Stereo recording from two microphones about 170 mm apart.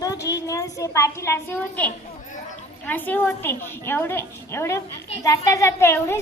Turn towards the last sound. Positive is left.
turn(degrees=15)  # may be behind; listen again after turning